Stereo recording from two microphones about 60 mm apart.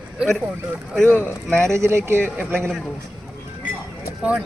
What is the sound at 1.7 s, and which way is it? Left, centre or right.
Speech, right.